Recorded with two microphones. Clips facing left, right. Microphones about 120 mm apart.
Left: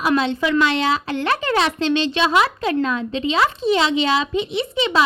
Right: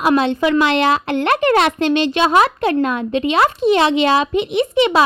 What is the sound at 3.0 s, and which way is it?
Speech, 55° right (ahead or behind).